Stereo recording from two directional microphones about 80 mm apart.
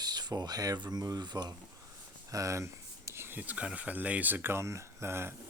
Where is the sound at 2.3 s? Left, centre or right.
Right.